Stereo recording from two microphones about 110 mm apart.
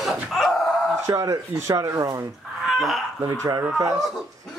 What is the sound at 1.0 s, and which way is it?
Speech, 30° right (ahead or behind).